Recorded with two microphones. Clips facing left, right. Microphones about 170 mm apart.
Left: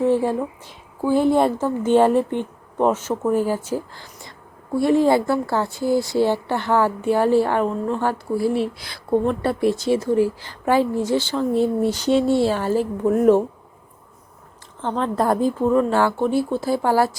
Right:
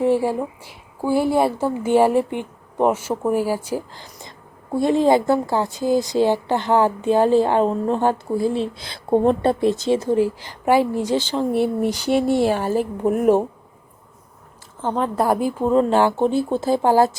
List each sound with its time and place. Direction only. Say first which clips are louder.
0.0 s speech: even; 10° right (ahead or behind)
14.8 s speech: right 1 dB; 10° right (ahead or behind)